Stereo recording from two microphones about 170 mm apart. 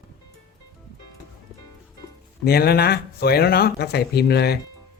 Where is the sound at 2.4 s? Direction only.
65° left (ahead or behind).